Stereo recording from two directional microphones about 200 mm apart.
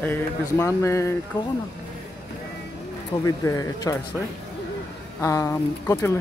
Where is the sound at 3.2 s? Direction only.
15° left (ahead or behind).